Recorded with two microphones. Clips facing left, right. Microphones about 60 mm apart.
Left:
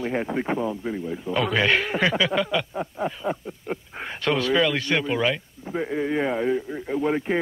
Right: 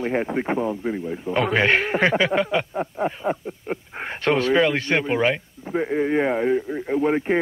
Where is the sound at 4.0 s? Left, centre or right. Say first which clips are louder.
Right 3 dB; right.